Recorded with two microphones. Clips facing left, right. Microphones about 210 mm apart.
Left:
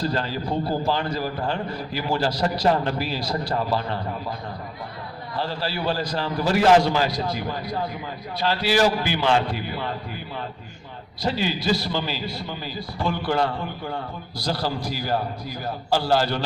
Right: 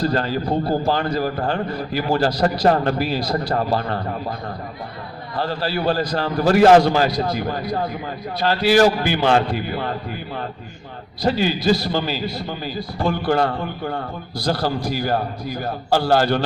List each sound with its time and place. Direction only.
0.0 s a man's voice: 50° right (ahead or behind)
5.4 s a man's voice: 50° right (ahead or behind)